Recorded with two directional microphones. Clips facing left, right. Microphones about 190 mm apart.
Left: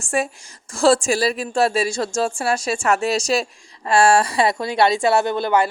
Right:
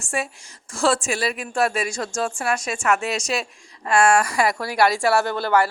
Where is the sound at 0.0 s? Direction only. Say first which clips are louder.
Left 5 dB; 40° left (ahead or behind).